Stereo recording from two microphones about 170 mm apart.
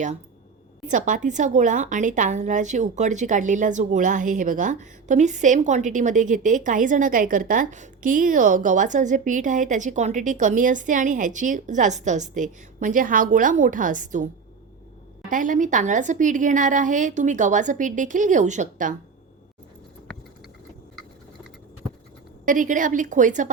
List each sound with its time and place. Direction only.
0.9 s a woman's voice: 50° right (ahead or behind)
15.3 s a woman's voice: 50° right (ahead or behind)
22.4 s a woman's voice: 50° right (ahead or behind)